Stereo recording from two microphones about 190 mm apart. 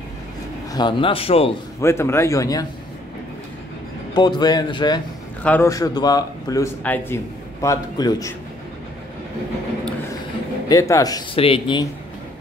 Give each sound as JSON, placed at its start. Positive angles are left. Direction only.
{"t": 0.7, "sound": "speech", "side_deg": 25}
{"t": 1.8, "sound": "a man's voice", "side_deg": 15}
{"t": 4.1, "sound": "speech", "side_deg": 20}
{"t": 5.4, "sound": "a man's voice", "side_deg": 10}
{"t": 10.7, "sound": "speech", "side_deg": 15}